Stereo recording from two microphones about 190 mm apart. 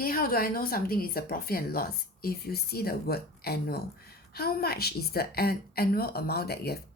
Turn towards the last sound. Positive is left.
turn(degrees=55)  # may be behind; listen again after turning